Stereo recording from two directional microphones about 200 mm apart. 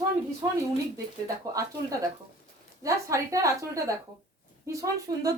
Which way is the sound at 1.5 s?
20° right (ahead or behind).